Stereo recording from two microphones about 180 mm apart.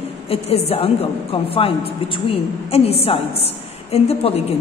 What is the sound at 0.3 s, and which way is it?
A woman's voice, 35° left (ahead or behind).